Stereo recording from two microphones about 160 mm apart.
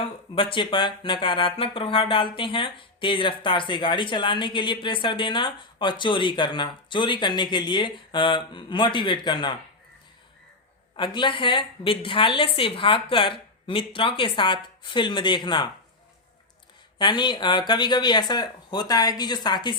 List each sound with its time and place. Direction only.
0.3 s speech: 30° left (ahead or behind)
10.9 s speech: 30° left (ahead or behind)
17.0 s speech: 30° left (ahead or behind)